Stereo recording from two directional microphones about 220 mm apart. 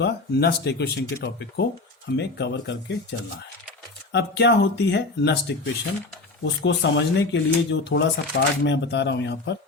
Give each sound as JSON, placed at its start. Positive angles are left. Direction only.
{"t": 0.0, "sound": "speech", "side_deg": 50}